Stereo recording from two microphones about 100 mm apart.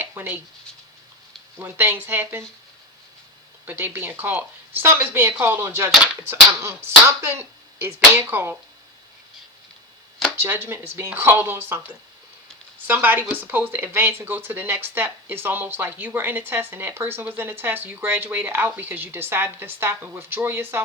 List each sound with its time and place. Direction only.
0.0 s speech: 20° right (ahead or behind)
1.5 s speech: 20° right (ahead or behind)
3.7 s speech: 20° right (ahead or behind)
10.4 s speech: 25° right (ahead or behind)